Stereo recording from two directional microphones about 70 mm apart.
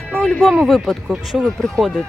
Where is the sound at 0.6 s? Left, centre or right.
Centre.